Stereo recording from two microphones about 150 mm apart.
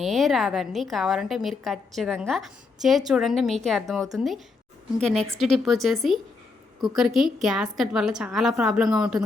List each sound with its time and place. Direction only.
0.0 s a woman's voice: centre (ahead or behind)
5.4 s a woman's voice: centre (ahead or behind)